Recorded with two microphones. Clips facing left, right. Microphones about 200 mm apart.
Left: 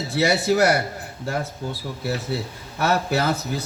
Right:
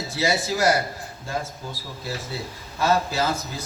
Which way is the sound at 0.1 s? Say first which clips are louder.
Left 5 dB; 65° left (ahead or behind).